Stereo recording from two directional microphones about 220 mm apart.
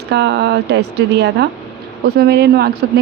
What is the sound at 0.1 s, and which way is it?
Speech, 50° right (ahead or behind).